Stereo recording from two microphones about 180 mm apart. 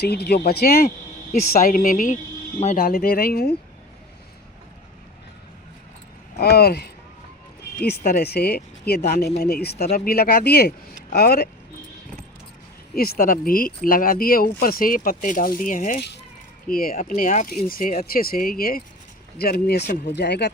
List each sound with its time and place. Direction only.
0.0 s speech: 65° left (ahead or behind)
1.3 s speech: 45° left (ahead or behind)
2.8 s speech: 55° left (ahead or behind)
6.4 s speech: 60° left (ahead or behind)
7.9 s speech: 60° left (ahead or behind)
12.9 s speech: 55° left (ahead or behind)